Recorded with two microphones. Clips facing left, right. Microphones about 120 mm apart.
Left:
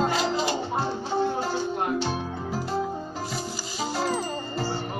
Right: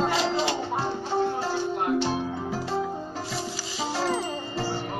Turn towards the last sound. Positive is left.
turn(degrees=5)  # may be behind; listen again after turning